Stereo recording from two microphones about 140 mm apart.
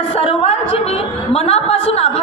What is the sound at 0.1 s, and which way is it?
A woman's voice, 45° left (ahead or behind).